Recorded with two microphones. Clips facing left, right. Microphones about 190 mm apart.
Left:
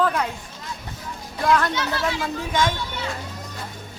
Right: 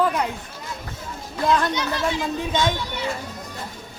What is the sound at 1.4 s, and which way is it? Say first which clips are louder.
Speech: even; 20° right (ahead or behind).